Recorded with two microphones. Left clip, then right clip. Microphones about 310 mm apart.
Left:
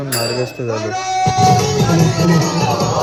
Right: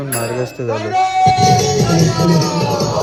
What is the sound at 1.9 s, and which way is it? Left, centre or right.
Music, centre.